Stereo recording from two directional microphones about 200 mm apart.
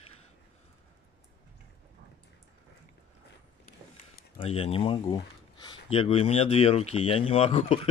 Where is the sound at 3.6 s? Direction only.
35° left (ahead or behind).